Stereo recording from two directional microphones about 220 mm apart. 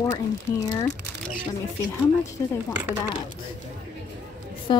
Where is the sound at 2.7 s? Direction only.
5° right (ahead or behind).